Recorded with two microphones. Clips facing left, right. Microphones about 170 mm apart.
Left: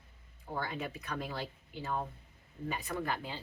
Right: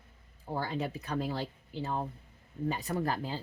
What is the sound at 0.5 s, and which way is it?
Speech, 30° right (ahead or behind).